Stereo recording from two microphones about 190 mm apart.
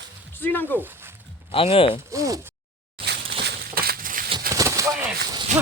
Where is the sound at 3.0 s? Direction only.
30° right (ahead or behind).